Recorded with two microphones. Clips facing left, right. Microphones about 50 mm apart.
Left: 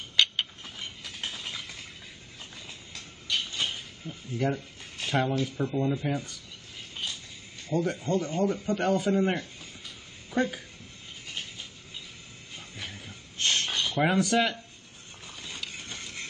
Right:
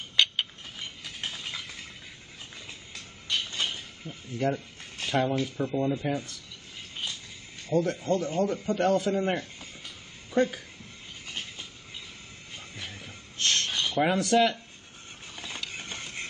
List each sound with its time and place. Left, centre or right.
0.1 s mechanisms: centre
1.0 s a sound: centre
2.6 s music: centre
3.6 s mechanisms: centre
5.0 s speech: centre
7.7 s speech: centre
9.1 s speech: centre
12.7 s a sound: centre
13.5 s a sound: centre
13.8 s speech: centre
15.7 s ratchet: right